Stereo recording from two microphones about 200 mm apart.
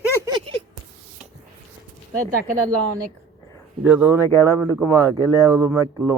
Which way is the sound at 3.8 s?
10° right (ahead or behind).